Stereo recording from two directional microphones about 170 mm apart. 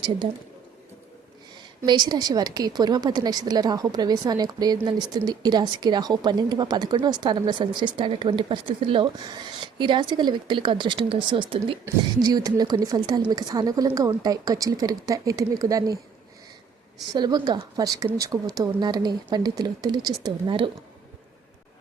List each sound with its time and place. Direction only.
0.2 s a woman's voice: 35° right (ahead or behind)
1.8 s a woman's voice: 25° right (ahead or behind)
17.1 s a woman's voice: 25° right (ahead or behind)